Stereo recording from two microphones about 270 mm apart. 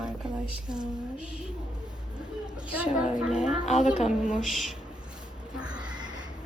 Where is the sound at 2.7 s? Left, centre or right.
Centre.